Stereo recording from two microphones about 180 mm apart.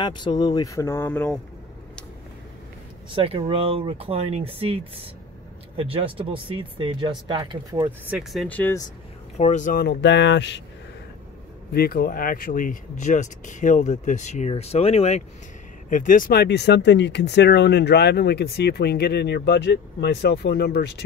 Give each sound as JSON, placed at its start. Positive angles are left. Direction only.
{"t": 0.0, "sound": "speech", "side_deg": 25}
{"t": 3.2, "sound": "speech", "side_deg": -30}
{"t": 7.7, "sound": "speech", "side_deg": -10}
{"t": 9.4, "sound": "speech", "side_deg": 40}
{"t": 9.8, "sound": "speech", "side_deg": 80}
{"t": 11.7, "sound": "speech", "side_deg": 60}
{"t": 15.9, "sound": "speech", "side_deg": 50}